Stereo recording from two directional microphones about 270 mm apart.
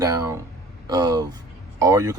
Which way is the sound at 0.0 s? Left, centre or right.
Centre.